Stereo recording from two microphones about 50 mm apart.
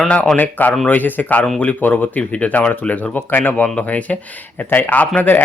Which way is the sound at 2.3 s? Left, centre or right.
Left.